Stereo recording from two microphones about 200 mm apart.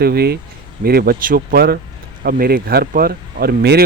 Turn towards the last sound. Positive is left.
turn(degrees=-50)  # may be behind; listen again after turning